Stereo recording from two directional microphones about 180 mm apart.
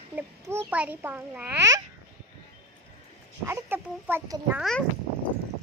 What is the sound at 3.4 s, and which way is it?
Speech, 10° right (ahead or behind).